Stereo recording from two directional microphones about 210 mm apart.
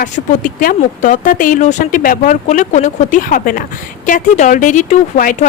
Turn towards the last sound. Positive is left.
turn(degrees=35)  # may be behind; listen again after turning